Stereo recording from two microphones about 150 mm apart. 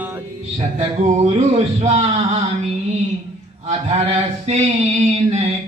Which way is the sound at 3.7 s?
45° right (ahead or behind).